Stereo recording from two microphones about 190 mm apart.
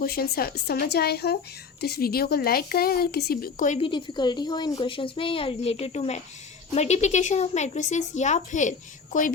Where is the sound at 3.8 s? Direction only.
25° left (ahead or behind).